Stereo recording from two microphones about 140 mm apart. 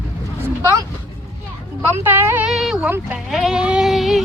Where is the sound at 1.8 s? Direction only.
15° right (ahead or behind).